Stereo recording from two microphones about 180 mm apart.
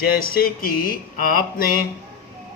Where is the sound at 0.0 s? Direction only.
55° left (ahead or behind).